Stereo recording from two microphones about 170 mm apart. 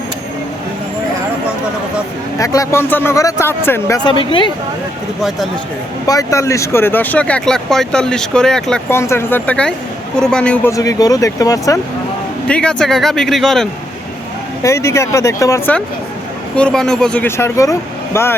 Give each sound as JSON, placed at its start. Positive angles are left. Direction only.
{"t": 2.4, "sound": "speech", "side_deg": 20}
{"t": 4.0, "sound": "speech", "side_deg": 30}
{"t": 6.1, "sound": "speech", "side_deg": 20}
{"t": 8.9, "sound": "a man's voice", "side_deg": 15}
{"t": 10.7, "sound": "speech", "side_deg": 20}
{"t": 12.5, "sound": "a man's voice", "side_deg": 5}
{"t": 14.6, "sound": "speech", "side_deg": 15}